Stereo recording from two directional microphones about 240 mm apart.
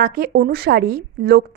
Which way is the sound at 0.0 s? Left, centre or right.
Right.